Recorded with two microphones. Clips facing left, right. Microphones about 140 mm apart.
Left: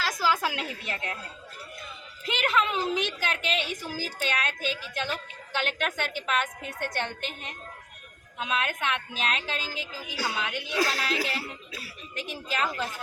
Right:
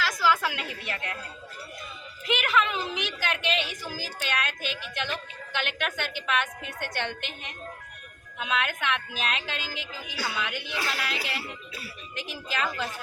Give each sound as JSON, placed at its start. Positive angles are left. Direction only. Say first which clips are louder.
{"t": 0.0, "sound": "a woman's voice", "louder": "right 2 dB", "side_deg": 35}
{"t": 2.2, "sound": "a woman's voice", "louder": "right 1 dB", "side_deg": 35}
{"t": 12.5, "sound": "a woman's voice", "louder": "left 1 dB", "side_deg": 30}